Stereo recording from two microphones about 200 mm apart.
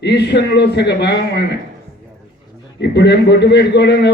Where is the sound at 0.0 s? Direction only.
55° left (ahead or behind).